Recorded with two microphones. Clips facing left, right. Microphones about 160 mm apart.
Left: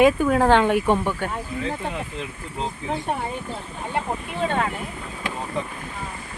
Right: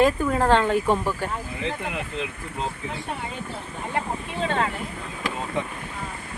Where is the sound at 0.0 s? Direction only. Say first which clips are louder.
Left 3 dB; 5° left (ahead or behind).